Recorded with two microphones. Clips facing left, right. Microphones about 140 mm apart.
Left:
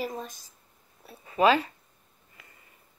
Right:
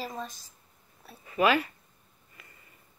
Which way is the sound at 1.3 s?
25° left (ahead or behind).